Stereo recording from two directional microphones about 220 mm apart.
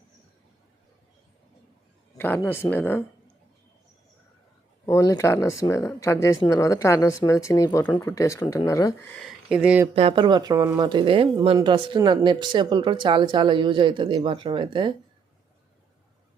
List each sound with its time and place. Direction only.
2.1 s speech: 10° left (ahead or behind)
4.9 s speech: 15° left (ahead or behind)
9.1 s speech: centre (ahead or behind)
9.9 s speech: 25° right (ahead or behind)